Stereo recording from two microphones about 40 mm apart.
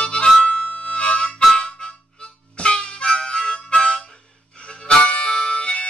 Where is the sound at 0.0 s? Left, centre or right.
Left.